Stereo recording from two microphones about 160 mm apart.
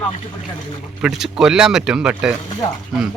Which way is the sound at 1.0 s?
Centre (ahead or behind).